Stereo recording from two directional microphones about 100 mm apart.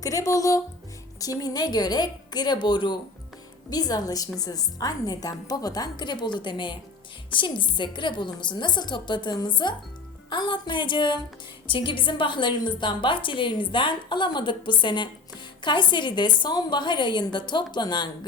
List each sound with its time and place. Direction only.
0.0 s a woman's voice: 35° left (ahead or behind)